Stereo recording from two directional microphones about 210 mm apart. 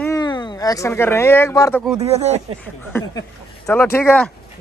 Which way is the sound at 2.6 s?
10° left (ahead or behind).